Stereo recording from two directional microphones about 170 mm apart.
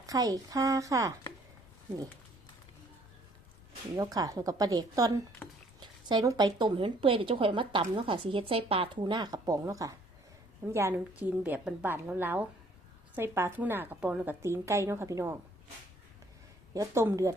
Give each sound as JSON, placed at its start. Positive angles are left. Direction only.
{"t": 0.0, "sound": "a woman's voice", "side_deg": -20}
{"t": 3.9, "sound": "a woman's voice", "side_deg": -20}
{"t": 16.7, "sound": "a woman's voice", "side_deg": -15}